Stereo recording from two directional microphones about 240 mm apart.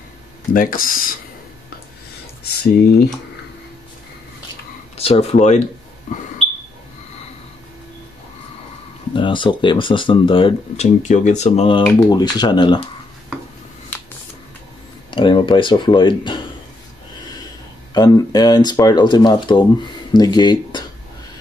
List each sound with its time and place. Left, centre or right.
0.5 s speech: left
2.4 s speech: left
4.9 s speech: left
9.1 s speech: centre
15.0 s speech: left
17.9 s speech: centre